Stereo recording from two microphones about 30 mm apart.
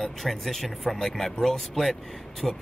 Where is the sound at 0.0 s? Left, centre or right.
Centre.